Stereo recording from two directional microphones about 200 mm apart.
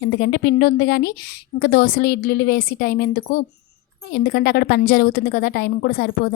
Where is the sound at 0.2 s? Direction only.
50° left (ahead or behind).